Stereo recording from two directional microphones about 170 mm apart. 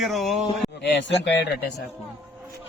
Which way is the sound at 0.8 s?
90° left.